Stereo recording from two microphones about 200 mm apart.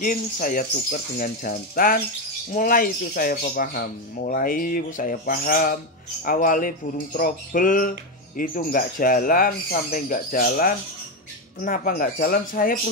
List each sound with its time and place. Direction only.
0.0 s speech: 45° left (ahead or behind)